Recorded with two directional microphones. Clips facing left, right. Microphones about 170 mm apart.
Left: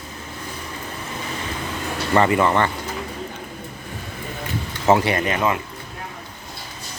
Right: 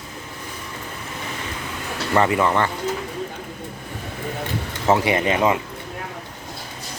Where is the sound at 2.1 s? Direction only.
Centre (ahead or behind).